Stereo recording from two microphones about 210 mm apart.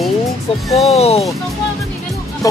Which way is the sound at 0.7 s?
Centre (ahead or behind).